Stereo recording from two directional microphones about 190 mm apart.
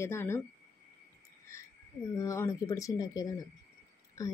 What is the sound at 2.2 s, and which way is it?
Speech, 15° left (ahead or behind).